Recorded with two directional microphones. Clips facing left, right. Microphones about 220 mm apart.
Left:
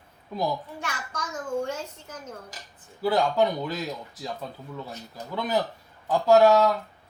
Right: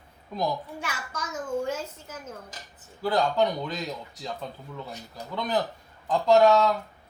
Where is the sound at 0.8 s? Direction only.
5° right (ahead or behind).